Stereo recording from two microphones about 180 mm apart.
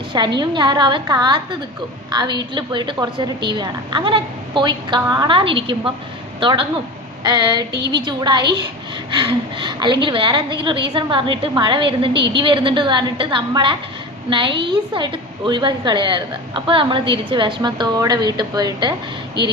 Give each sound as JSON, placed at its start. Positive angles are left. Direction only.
{"t": 0.3, "sound": "a woman's voice", "side_deg": -25}
{"t": 7.7, "sound": "a woman's voice", "side_deg": -65}
{"t": 8.0, "sound": "a woman's voice", "side_deg": -25}
{"t": 9.6, "sound": "a woman's voice", "side_deg": -25}
{"t": 12.1, "sound": "a woman's voice", "side_deg": -75}
{"t": 12.4, "sound": "a woman's voice", "side_deg": -25}